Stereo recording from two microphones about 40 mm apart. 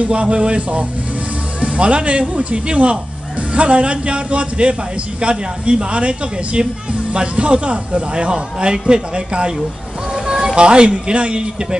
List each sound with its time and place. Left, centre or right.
0.0 s speech: right